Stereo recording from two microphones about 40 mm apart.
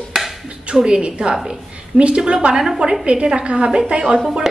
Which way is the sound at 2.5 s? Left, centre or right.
Centre.